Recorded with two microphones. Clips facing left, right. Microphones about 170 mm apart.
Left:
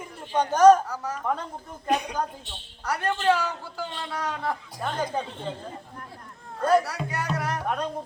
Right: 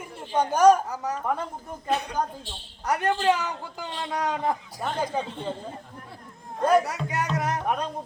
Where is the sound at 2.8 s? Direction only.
20° right (ahead or behind).